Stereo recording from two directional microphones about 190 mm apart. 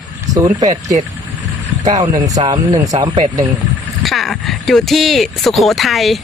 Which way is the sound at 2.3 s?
20° right (ahead or behind).